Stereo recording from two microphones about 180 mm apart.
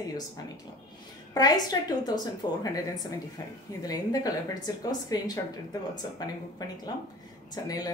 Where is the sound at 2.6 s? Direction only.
20° left (ahead or behind).